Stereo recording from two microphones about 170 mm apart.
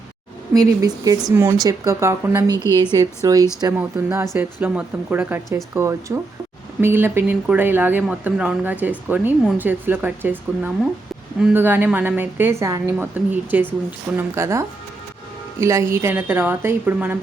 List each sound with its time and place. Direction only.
0.5 s speech: 20° right (ahead or behind)